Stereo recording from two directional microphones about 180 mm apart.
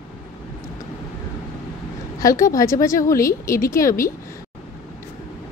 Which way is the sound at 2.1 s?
20° left (ahead or behind).